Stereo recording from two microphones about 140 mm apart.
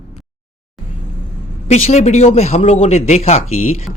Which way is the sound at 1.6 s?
50° left (ahead or behind).